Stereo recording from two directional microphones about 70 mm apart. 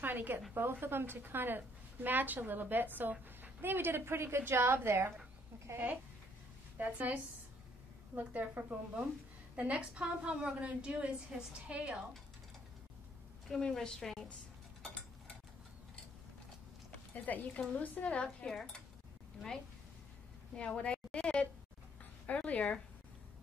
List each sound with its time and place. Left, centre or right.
0.0 s a woman's voice: right
6.8 s a woman's voice: right
8.2 s a woman's voice: right
13.5 s a woman's voice: centre
17.1 s a woman's voice: left
18.5 s speech: centre
20.5 s a woman's voice: centre